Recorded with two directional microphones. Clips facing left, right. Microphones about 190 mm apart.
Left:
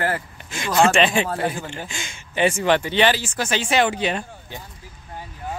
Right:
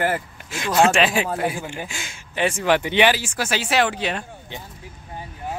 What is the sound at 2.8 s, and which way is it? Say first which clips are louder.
Speech: right 1 dB; 15° right (ahead or behind).